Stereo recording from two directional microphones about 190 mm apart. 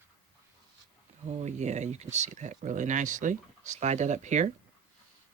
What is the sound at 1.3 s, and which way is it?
Speech, 35° right (ahead or behind).